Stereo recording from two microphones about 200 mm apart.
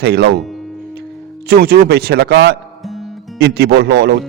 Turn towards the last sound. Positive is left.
turn(degrees=-55)  # may be behind; listen again after turning